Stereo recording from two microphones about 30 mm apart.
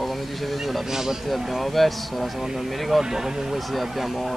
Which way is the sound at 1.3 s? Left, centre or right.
Centre.